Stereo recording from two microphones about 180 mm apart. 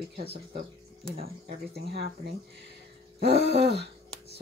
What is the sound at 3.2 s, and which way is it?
Speech, 70° right (ahead or behind).